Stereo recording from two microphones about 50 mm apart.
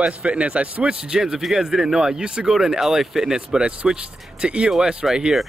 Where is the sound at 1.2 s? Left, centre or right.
Centre.